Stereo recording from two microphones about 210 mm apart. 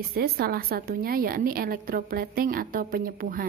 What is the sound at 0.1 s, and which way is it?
A woman's voice, 45° right (ahead or behind).